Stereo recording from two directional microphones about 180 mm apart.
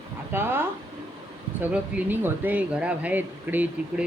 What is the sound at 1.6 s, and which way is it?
Speech, 10° right (ahead or behind).